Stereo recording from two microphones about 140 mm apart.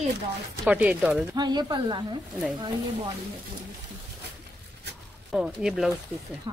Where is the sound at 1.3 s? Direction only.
30° right (ahead or behind).